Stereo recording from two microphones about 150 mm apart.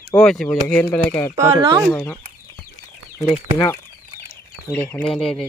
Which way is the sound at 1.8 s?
10° left (ahead or behind).